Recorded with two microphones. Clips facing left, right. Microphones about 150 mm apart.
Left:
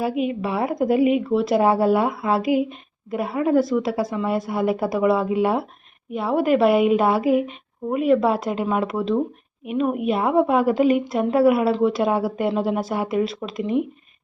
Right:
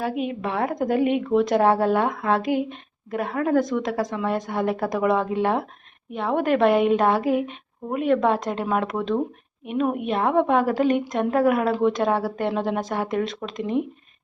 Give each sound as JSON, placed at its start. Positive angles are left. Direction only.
{"t": 0.0, "sound": "a woman's voice", "side_deg": 5}